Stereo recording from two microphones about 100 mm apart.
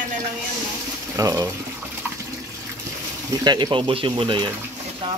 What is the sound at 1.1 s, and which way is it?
Speech, 35° right (ahead or behind).